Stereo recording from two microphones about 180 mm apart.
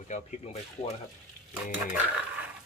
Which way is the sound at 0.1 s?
45° left (ahead or behind).